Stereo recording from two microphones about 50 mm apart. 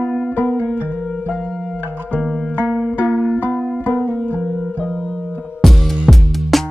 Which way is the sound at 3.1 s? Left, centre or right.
Centre.